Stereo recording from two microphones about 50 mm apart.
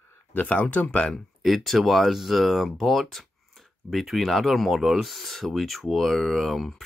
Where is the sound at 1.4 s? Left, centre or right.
Centre.